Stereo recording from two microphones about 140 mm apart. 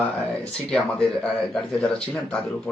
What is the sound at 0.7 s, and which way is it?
Speech, 5° left (ahead or behind).